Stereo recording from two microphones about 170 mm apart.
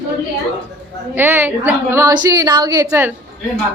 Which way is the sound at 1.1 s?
10° right (ahead or behind).